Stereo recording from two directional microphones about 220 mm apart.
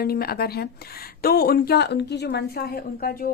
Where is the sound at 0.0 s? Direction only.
45° left (ahead or behind).